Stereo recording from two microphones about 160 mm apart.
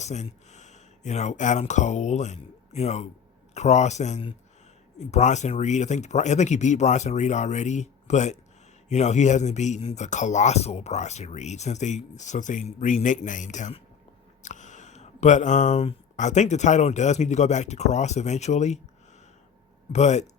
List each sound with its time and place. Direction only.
0.0 s a man's voice: 45° left (ahead or behind)
19.9 s a man's voice: 45° left (ahead or behind)